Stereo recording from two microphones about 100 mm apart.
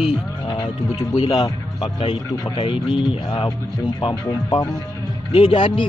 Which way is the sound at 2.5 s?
55° left (ahead or behind).